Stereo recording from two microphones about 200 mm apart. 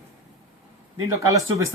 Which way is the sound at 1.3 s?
15° right (ahead or behind).